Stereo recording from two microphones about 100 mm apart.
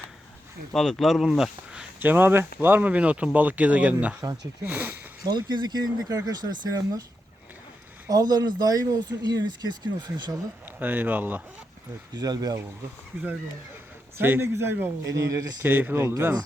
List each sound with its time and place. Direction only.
0.7 s speech: 5° left (ahead or behind)
2.0 s speech: 20° right (ahead or behind)
4.2 s speech: 40° right (ahead or behind)
4.6 s speech: 20° right (ahead or behind)
5.2 s speech: 45° right (ahead or behind)
8.0 s speech: 40° right (ahead or behind)
10.8 s speech: 15° right (ahead or behind)
12.1 s speech: 40° right (ahead or behind)
14.2 s speech: 25° right (ahead or behind)
15.6 s speech: 20° right (ahead or behind)